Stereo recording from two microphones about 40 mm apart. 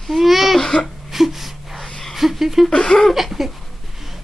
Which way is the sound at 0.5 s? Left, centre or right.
Centre.